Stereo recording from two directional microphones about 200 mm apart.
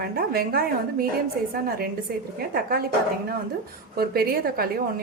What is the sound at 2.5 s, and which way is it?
Speech, 50° right (ahead or behind).